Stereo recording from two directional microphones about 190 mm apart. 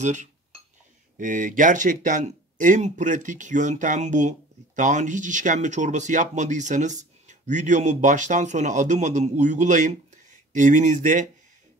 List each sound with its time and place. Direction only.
0.0 s speech: 40° right (ahead or behind)